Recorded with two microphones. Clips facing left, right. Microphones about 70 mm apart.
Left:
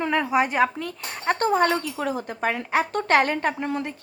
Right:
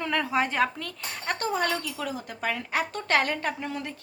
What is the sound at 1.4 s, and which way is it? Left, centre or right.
A woman's voice, left.